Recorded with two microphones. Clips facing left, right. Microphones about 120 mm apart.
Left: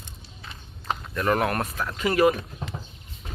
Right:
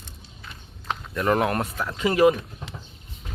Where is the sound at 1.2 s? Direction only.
20° right (ahead or behind).